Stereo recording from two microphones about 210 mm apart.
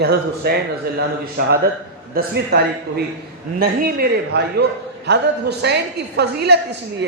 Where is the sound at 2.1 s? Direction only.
45° right (ahead or behind).